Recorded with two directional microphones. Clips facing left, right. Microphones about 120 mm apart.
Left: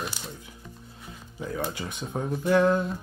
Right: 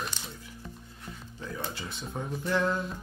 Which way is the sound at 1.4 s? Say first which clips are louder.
Left 6 dB; 15° left (ahead or behind).